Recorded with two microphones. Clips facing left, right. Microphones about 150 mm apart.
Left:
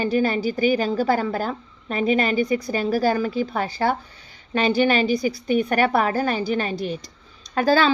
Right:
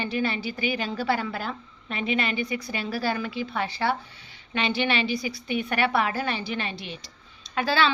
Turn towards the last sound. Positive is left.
turn(degrees=45)  # may be behind; listen again after turning